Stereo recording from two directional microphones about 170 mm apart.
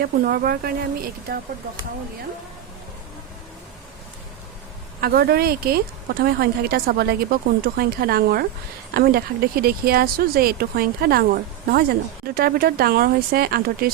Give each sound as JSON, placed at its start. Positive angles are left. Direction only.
{"t": 0.0, "sound": "speech", "side_deg": -65}
{"t": 4.9, "sound": "speech", "side_deg": -65}